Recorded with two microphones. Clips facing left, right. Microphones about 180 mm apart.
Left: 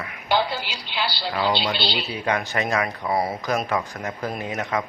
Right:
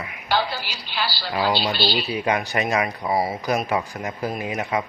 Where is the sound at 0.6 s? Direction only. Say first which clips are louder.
Even; 60° left (ahead or behind).